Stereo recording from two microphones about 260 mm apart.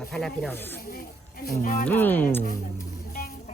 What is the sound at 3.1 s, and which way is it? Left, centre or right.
Music, left.